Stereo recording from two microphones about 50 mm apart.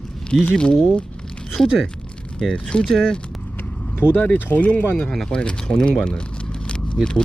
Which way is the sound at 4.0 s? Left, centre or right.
Left.